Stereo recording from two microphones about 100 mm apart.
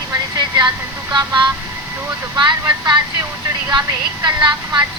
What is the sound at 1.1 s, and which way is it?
A woman's voice, 50° right (ahead or behind).